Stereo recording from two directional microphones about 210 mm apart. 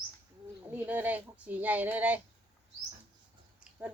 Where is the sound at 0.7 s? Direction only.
10° right (ahead or behind).